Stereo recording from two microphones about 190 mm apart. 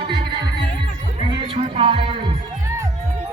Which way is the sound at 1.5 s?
25° right (ahead or behind).